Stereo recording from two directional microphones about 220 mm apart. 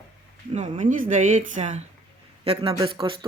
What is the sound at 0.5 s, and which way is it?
A man's voice, 30° right (ahead or behind).